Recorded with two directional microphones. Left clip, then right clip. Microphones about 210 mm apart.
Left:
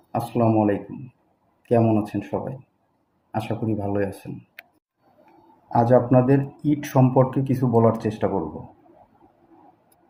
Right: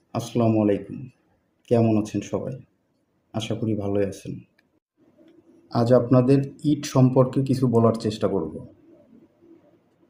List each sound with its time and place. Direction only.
0.1 s speech: 20° right (ahead or behind)
5.7 s speech: 25° right (ahead or behind)